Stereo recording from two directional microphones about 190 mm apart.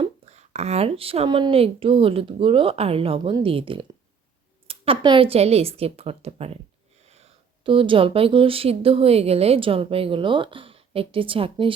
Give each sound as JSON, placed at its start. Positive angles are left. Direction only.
{"t": 0.0, "sound": "a woman's voice", "side_deg": -35}